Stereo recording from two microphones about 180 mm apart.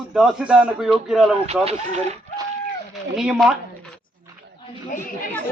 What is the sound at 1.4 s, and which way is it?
Speech, 35° right (ahead or behind).